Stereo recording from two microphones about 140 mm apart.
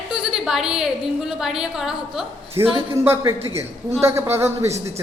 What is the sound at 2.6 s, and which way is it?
Speech, 40° right (ahead or behind).